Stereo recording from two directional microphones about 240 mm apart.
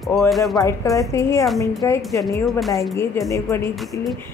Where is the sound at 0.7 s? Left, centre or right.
Centre.